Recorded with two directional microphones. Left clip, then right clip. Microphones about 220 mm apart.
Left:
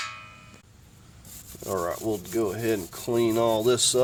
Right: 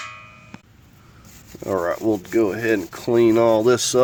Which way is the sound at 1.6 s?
35° right (ahead or behind).